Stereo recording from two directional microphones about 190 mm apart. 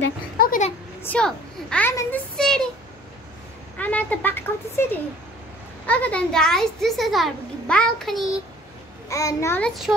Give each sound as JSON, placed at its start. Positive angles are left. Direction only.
{"t": 0.4, "sound": "a sound", "side_deg": 45}
{"t": 1.0, "sound": "a child's voice", "side_deg": 5}
{"t": 3.7, "sound": "a woman's voice", "side_deg": 10}
{"t": 5.9, "sound": "a child's voice", "side_deg": 5}
{"t": 9.1, "sound": "a child's voice", "side_deg": 15}
{"t": 9.7, "sound": "a child's voice", "side_deg": 0}